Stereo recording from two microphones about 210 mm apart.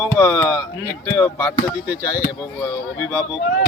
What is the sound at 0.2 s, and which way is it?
Speech, 10° left (ahead or behind).